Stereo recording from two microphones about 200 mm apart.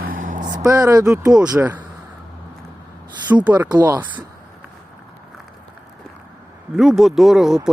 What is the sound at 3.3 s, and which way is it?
Speech, 10° right (ahead or behind).